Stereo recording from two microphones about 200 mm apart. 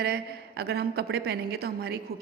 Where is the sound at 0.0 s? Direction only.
50° right (ahead or behind).